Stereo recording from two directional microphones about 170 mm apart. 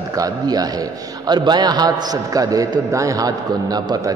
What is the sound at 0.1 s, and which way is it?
A man's voice, 20° right (ahead or behind).